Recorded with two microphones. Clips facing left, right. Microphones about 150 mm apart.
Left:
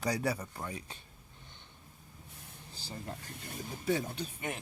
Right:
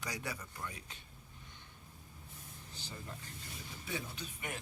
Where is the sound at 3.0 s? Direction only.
60° left (ahead or behind); by 4.5 s 30° left (ahead or behind).